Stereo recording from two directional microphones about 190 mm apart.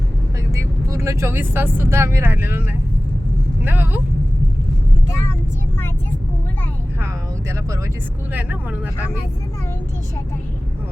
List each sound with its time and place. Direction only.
0.5 s speech: 15° right (ahead or behind)
8.3 s speech: 10° right (ahead or behind)